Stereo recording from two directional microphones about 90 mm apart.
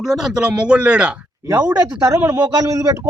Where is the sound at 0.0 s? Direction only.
5° right (ahead or behind).